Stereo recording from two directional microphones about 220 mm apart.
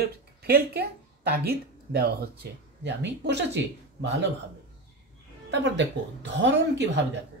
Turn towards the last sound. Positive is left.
turn(degrees=-50)  # may be behind; listen again after turning